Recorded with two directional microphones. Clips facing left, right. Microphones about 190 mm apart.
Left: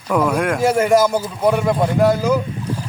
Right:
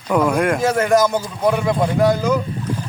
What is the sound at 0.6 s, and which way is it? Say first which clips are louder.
Speech: left 4 dB; 10° left (ahead or behind).